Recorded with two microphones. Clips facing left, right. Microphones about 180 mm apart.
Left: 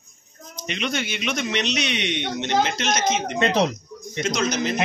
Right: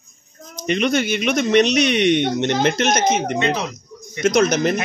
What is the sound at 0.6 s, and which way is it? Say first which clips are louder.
Speech: right 8 dB; 45° right (ahead or behind).